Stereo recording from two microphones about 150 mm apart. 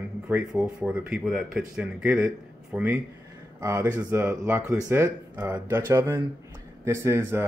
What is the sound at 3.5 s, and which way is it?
Speech, 20° right (ahead or behind).